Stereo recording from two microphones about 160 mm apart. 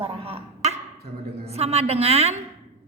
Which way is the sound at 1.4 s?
40° right (ahead or behind).